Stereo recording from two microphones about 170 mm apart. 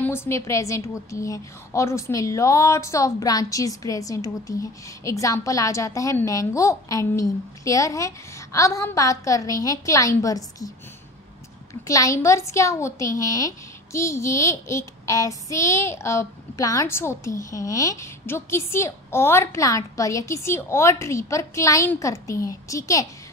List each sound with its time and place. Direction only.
0.0 s a woman's voice: 15° left (ahead or behind)
11.9 s child singing: 20° left (ahead or behind)